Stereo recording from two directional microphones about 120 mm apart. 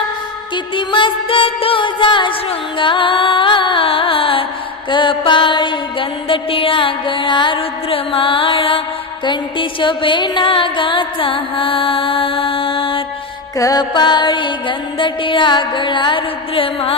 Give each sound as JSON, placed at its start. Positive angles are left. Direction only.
{"t": 0.5, "sound": "music", "side_deg": 40}
{"t": 2.7, "sound": "carnatic music", "side_deg": 45}
{"t": 4.9, "sound": "mantra", "side_deg": 40}
{"t": 9.2, "sound": "music", "side_deg": 40}
{"t": 13.6, "sound": "music", "side_deg": 30}